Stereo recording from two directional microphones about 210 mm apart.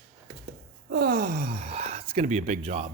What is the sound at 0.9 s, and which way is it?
Speech, 50° right (ahead or behind).